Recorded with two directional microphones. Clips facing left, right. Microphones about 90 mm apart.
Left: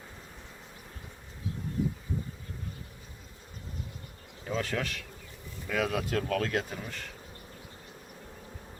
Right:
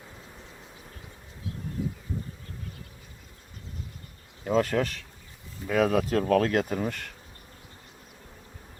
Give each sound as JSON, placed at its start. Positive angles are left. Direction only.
{"t": 4.4, "sound": "bee", "side_deg": -45}
{"t": 5.6, "sound": "speech", "side_deg": -40}